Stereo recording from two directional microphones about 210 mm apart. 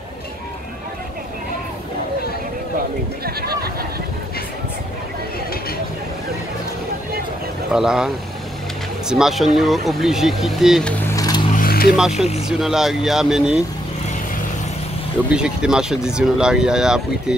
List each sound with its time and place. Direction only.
3.3 s speech: 45° right (ahead or behind)
7.7 s speech: 5° right (ahead or behind)
9.1 s speech: centre (ahead or behind)
11.1 s a sound: 15° left (ahead or behind)
11.5 s a sound: 45° left (ahead or behind)
12.4 s speech: centre (ahead or behind)
15.3 s speech: 5° right (ahead or behind)